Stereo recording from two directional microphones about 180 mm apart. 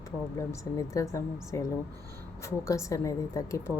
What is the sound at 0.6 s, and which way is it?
A woman's voice, 15° left (ahead or behind).